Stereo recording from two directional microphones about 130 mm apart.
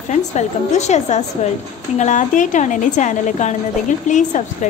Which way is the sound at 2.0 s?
70° left (ahead or behind).